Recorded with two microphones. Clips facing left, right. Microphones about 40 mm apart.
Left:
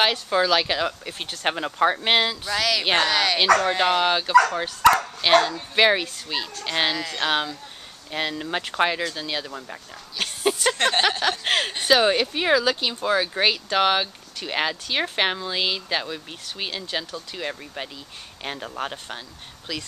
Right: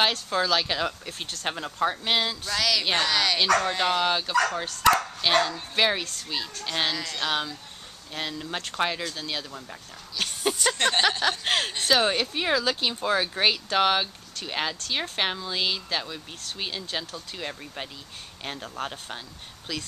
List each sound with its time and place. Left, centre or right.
0.0 s speech: centre
2.4 s speech: centre
2.8 s speech: left
3.1 s speech: centre
12.8 s speech: centre
17.1 s speech: centre
18.4 s speech: centre
19.7 s speech: centre